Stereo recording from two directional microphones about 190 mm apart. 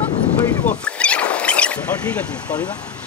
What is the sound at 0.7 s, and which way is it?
Rodents, 5° left (ahead or behind).